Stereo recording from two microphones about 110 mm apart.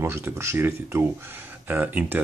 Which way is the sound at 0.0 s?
20° right (ahead or behind).